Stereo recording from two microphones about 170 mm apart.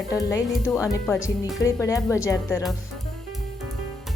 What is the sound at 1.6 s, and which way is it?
A woman's voice, 15° left (ahead or behind).